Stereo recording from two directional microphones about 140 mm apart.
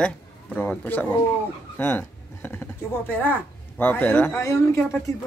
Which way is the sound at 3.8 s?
15° left (ahead or behind).